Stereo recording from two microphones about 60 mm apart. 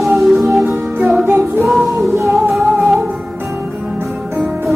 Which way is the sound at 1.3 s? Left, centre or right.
Right.